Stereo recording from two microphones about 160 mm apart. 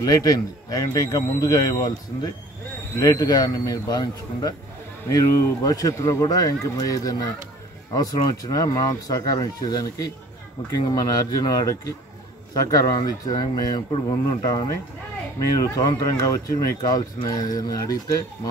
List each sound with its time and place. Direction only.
0.0 s speech: 20° left (ahead or behind)